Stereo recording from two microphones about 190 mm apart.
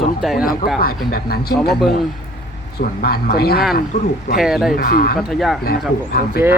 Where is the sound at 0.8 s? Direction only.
50° left (ahead or behind).